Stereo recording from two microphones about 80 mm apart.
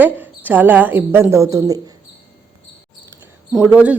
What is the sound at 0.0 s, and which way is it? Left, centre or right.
Speech, right.